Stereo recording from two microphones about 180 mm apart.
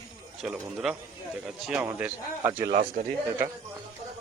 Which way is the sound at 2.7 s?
50° right (ahead or behind).